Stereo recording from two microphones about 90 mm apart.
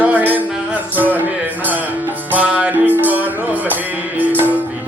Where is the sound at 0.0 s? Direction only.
15° right (ahead or behind).